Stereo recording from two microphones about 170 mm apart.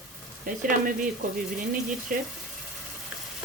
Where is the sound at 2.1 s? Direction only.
55° right (ahead or behind).